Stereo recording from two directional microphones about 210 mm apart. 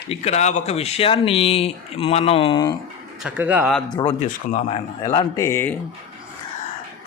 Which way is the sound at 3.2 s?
10° right (ahead or behind).